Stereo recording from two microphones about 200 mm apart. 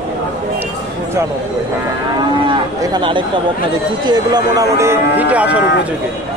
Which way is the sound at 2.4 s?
25° right (ahead or behind).